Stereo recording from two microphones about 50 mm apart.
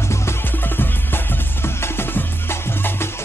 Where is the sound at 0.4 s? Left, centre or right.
Left.